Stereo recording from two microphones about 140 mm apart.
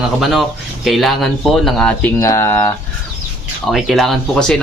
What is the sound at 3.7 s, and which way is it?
Speech, centre (ahead or behind).